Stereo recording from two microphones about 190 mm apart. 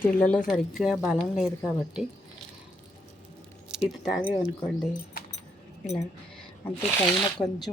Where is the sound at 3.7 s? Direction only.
5° right (ahead or behind).